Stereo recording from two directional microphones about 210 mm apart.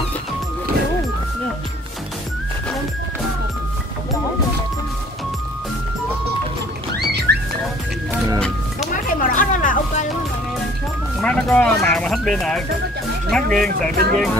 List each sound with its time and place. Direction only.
7.1 s music: 50° right (ahead or behind)
8.9 s music: 40° left (ahead or behind)
11.1 s music: 5° left (ahead or behind)
13.3 s speech: centre (ahead or behind)
13.9 s speech: 45° right (ahead or behind)